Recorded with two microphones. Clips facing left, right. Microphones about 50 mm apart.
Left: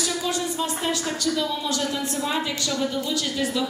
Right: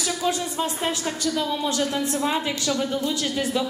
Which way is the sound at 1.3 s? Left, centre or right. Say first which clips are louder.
Right 1 dB; right.